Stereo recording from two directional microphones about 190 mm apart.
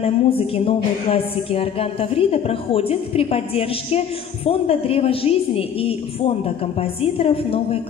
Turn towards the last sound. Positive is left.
turn(degrees=30)  # may be behind; listen again after turning